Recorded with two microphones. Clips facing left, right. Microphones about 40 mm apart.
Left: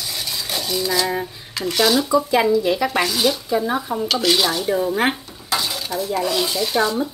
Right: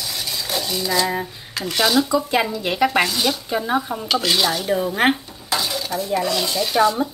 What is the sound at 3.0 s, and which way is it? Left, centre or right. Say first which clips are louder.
Speech: left 1 dB; centre.